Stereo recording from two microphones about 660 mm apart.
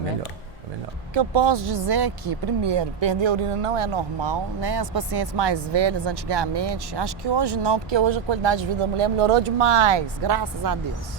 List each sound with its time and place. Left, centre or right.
1.1 s speech: right